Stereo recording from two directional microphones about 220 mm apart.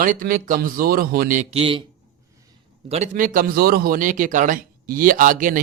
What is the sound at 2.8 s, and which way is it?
Speech, 30° right (ahead or behind).